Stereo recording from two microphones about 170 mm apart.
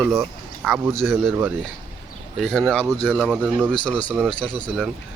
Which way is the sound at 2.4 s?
Centre (ahead or behind).